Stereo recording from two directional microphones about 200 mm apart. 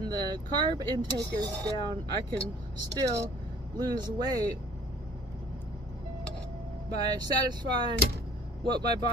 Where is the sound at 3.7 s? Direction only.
20° right (ahead or behind).